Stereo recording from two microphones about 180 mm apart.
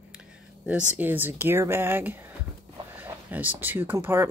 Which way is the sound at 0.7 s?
10° right (ahead or behind).